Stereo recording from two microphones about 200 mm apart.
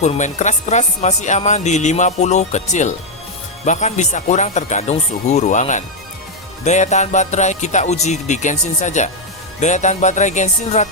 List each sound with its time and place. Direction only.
0.0 s speech: 35° left (ahead or behind)